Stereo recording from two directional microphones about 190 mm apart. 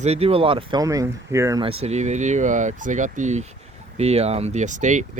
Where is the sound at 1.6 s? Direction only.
30° right (ahead or behind).